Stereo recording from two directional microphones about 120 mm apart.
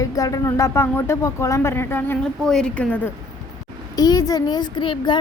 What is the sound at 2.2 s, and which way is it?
Speech, 5° left (ahead or behind).